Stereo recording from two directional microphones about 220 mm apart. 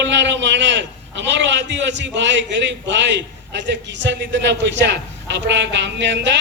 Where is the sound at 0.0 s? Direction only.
55° right (ahead or behind).